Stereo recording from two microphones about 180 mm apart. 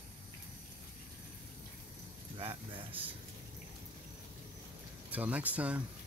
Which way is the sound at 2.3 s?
30° right (ahead or behind).